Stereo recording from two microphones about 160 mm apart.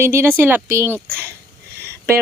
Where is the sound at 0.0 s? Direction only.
15° right (ahead or behind).